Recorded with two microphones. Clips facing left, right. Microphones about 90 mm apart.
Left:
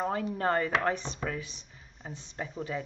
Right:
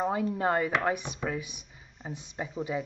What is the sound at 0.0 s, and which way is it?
Speech, 10° right (ahead or behind).